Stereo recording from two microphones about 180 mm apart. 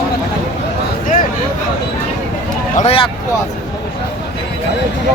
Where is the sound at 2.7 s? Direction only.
35° left (ahead or behind).